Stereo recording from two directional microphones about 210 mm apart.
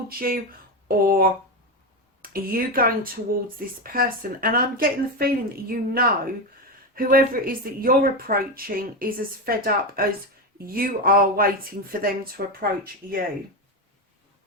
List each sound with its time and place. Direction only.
0.9 s speech: 45° right (ahead or behind)